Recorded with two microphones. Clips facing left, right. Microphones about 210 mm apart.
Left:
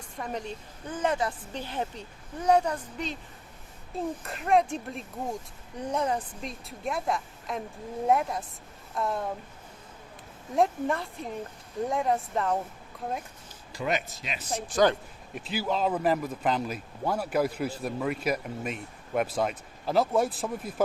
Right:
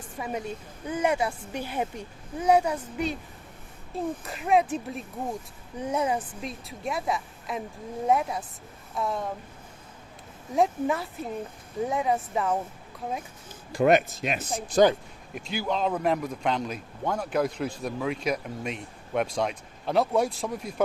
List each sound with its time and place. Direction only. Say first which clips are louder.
0.2 s a man's voice: right 2 dB; 10° right (ahead or behind)
10.5 s a man's voice: right 1 dB; centre (ahead or behind)
13.7 s speech: right 10 dB; 55° right (ahead or behind)
15.4 s a man's voice: even; centre (ahead or behind)